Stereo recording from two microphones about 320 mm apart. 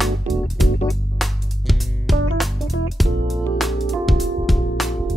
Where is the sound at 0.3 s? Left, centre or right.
Right.